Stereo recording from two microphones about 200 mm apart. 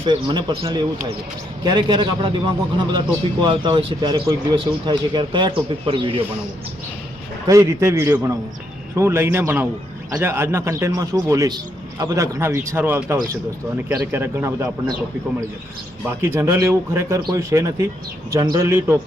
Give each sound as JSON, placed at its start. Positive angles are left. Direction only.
{"t": 0.0, "sound": "a man's voice", "side_deg": -25}
{"t": 7.4, "sound": "a man's voice", "side_deg": -15}
{"t": 16.0, "sound": "a man's voice", "side_deg": -10}